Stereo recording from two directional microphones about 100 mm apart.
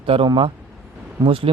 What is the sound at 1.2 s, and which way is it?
Speech, 65° right (ahead or behind).